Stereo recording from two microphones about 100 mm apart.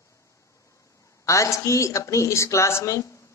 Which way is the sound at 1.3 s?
30° left (ahead or behind).